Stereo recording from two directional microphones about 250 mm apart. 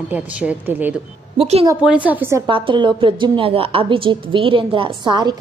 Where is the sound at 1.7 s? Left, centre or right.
Centre.